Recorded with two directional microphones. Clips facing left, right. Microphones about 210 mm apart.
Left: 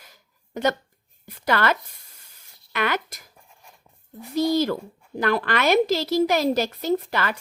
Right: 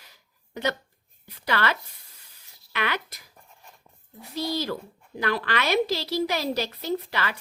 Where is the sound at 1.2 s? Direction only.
50° left (ahead or behind).